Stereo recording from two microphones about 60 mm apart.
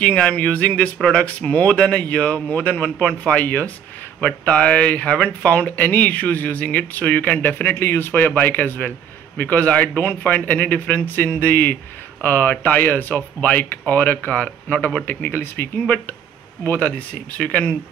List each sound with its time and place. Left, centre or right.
0.0 s a man's voice: centre
15.0 s speech: left
16.6 s a man's voice: left